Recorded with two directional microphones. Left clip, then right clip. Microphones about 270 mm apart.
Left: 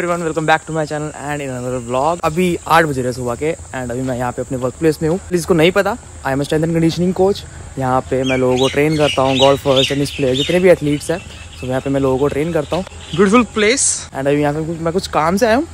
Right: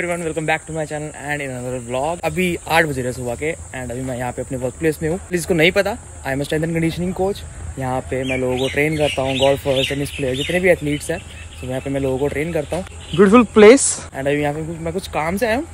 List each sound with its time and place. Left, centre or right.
0.0 s speech: centre
13.2 s speech: centre
14.1 s speech: centre